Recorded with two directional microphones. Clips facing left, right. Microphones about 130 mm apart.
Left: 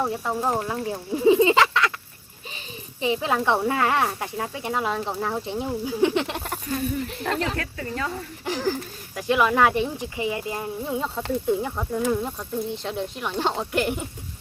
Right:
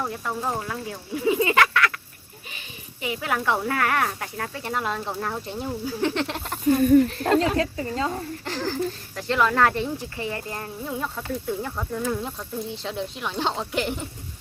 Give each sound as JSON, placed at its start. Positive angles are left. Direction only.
{"t": 0.0, "sound": "speech", "side_deg": 20}
{"t": 3.0, "sound": "speech", "side_deg": 25}
{"t": 7.3, "sound": "speech", "side_deg": -20}
{"t": 8.4, "sound": "speech", "side_deg": 15}